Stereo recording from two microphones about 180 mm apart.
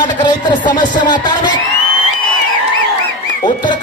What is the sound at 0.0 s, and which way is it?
Speech, 25° left (ahead or behind).